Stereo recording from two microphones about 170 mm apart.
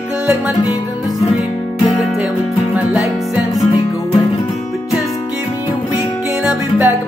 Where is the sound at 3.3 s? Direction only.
Centre (ahead or behind).